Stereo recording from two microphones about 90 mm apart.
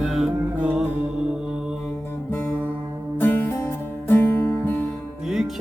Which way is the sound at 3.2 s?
20° left (ahead or behind).